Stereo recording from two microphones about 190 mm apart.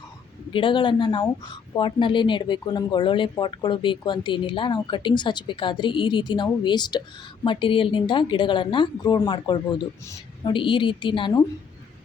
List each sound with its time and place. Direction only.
0.5 s speech: 25° left (ahead or behind)